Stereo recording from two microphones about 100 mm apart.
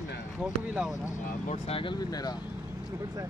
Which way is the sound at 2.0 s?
40° left (ahead or behind).